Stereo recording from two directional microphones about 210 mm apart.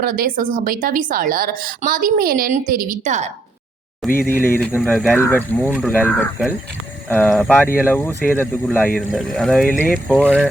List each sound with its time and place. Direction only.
0.0 s a woman's voice: 45° right (ahead or behind)
4.1 s speech: 10° left (ahead or behind)